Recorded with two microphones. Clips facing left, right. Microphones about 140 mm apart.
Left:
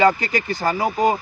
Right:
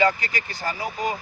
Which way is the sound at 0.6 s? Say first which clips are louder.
Left 7 dB; 60° left (ahead or behind).